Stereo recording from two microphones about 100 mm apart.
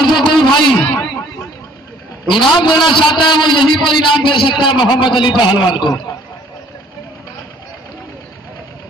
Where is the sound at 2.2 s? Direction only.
55° left (ahead or behind).